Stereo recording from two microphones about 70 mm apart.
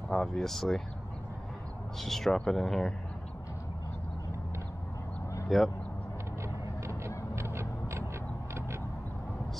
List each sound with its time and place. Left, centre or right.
0.1 s speech: centre
2.0 s speech: centre
5.5 s speech: centre
6.8 s vehicle: right
7.3 s honk: right
8.5 s vehicle: right